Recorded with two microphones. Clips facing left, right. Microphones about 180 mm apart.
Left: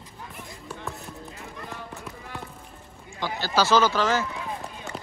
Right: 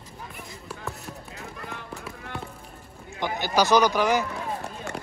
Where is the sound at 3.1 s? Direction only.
20° right (ahead or behind).